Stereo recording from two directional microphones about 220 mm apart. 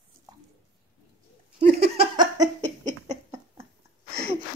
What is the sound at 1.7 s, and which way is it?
Laughter, 45° right (ahead or behind).